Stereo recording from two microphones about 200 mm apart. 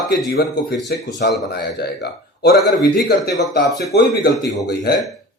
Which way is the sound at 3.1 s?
50° left (ahead or behind).